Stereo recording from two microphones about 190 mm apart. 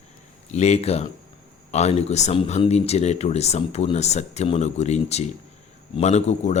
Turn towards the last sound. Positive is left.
turn(degrees=35)  # may be behind; listen again after turning